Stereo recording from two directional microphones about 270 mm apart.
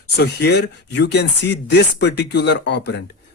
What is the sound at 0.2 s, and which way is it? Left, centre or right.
Speech, left.